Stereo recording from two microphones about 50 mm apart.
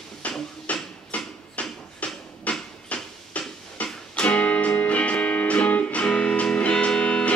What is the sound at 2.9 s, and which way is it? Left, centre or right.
Music, left.